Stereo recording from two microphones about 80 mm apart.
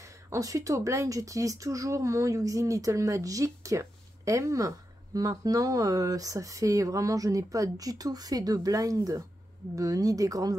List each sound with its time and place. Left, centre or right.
0.3 s speech: right